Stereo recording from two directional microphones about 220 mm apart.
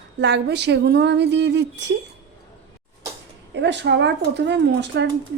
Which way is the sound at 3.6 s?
50° right (ahead or behind).